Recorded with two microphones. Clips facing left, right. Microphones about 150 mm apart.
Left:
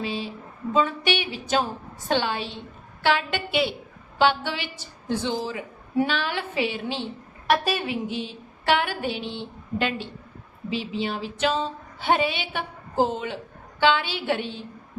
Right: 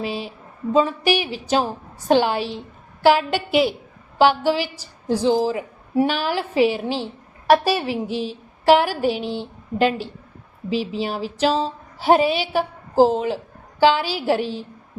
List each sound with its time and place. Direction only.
0.7 s a woman's voice: 35° right (ahead or behind)